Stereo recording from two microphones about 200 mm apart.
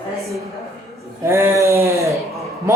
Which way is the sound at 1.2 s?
15° right (ahead or behind).